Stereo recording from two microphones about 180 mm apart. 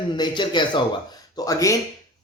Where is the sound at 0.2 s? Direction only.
25° left (ahead or behind).